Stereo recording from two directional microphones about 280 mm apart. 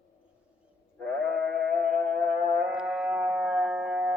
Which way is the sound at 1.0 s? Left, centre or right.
Right.